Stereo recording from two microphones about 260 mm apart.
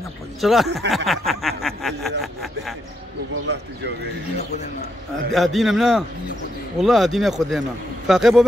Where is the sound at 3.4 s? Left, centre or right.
Right.